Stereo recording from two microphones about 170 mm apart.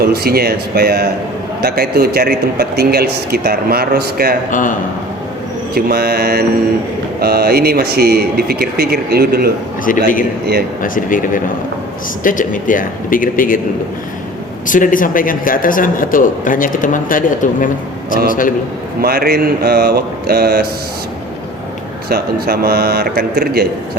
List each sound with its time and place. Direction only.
0.0 s a man's voice: 65° right (ahead or behind)
4.5 s a man's voice: 50° left (ahead or behind)
5.7 s a man's voice: 65° right (ahead or behind)
10.8 s a man's voice: 50° left (ahead or behind)
14.7 s a man's voice: 50° left (ahead or behind)
19.0 s speech: 65° right (ahead or behind)
22.1 s a man's voice: 65° right (ahead or behind)